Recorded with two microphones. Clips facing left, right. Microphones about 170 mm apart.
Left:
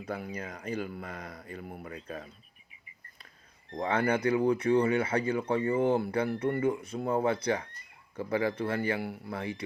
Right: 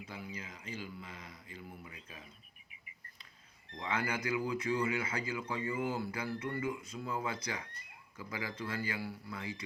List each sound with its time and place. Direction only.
0.1 s speech: 65° left (ahead or behind)
3.7 s speech: 40° left (ahead or behind)
9.0 s speech: 55° left (ahead or behind)
9.3 s speech: 30° left (ahead or behind)